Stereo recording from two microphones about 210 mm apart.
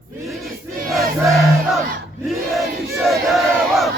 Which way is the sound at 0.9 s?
Centre (ahead or behind).